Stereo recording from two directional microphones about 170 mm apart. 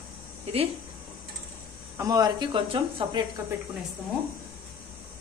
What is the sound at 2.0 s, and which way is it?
Speech, 20° right (ahead or behind).